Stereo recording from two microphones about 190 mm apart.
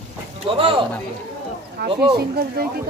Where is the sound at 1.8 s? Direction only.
60° right (ahead or behind).